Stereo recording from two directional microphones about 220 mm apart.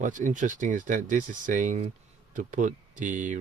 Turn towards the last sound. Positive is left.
turn(degrees=-35)  # may be behind; listen again after turning